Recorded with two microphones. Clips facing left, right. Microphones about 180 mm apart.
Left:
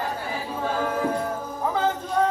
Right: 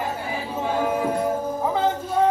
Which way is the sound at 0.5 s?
10° right (ahead or behind).